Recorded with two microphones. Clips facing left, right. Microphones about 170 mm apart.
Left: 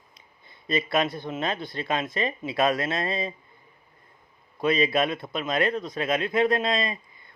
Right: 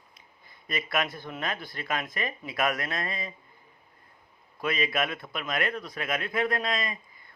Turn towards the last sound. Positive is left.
turn(degrees=25)  # may be behind; listen again after turning